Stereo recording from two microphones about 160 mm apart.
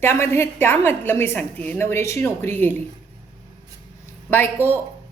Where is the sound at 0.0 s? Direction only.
15° left (ahead or behind).